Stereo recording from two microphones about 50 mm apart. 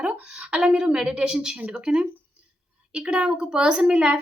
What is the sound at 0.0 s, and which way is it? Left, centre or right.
A woman's voice, right.